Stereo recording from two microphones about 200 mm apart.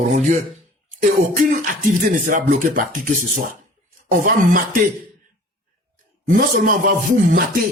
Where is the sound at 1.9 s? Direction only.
40° right (ahead or behind).